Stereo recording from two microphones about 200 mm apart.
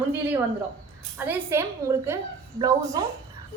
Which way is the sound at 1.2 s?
10° right (ahead or behind).